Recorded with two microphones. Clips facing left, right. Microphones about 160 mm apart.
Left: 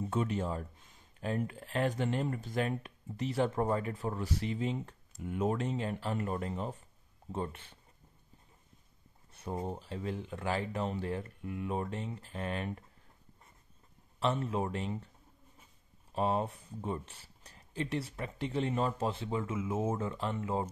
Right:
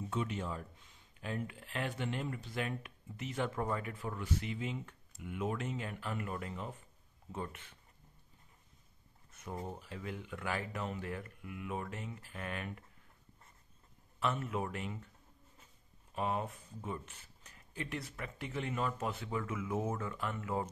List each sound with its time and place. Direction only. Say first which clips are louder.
0.0 s speech: left 5 dB; 45° left (ahead or behind)
9.3 s speech: left 5 dB; 30° left (ahead or behind)
14.2 s speech: left 4 dB; 30° left (ahead or behind)
16.1 s speech: left 5 dB; 30° left (ahead or behind)